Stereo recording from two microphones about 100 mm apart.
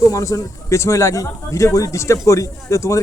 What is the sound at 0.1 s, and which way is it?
Speech, 35° left (ahead or behind).